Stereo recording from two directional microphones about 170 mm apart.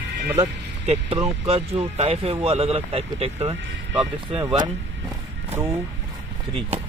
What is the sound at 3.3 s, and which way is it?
Speech, 15° right (ahead or behind).